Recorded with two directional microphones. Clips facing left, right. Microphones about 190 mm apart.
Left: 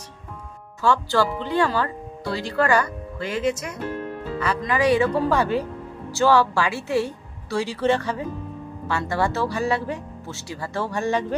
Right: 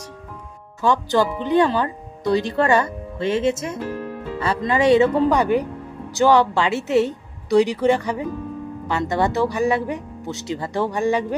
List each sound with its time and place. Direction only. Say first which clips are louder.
0.8 s speech: right 2 dB; 20° right (ahead or behind)